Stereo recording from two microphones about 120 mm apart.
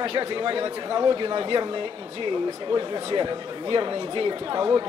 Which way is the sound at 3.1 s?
40° right (ahead or behind).